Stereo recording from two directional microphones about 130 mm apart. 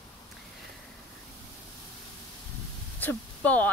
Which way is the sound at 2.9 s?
15° left (ahead or behind).